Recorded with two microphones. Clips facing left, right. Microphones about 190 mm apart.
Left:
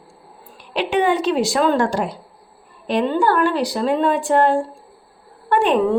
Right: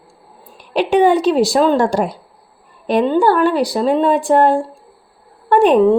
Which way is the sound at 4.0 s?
40° right (ahead or behind).